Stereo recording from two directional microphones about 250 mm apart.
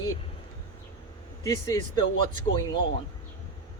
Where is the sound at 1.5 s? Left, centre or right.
Centre.